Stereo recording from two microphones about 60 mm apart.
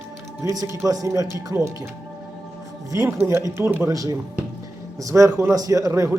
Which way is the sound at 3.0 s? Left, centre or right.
Right.